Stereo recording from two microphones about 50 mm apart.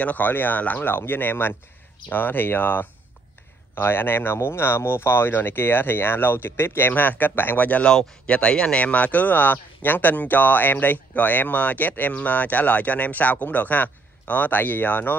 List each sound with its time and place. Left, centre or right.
0.0 s speech: left
0.9 s speech: left
6.9 s speech: left
7.8 s speech: centre
8.3 s speech: left